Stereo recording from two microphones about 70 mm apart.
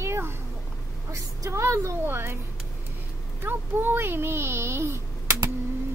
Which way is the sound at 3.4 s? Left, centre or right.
Right.